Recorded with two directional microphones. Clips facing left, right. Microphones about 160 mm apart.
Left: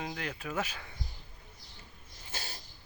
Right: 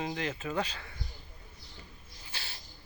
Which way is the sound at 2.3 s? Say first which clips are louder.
Left 3 dB; 45° left (ahead or behind).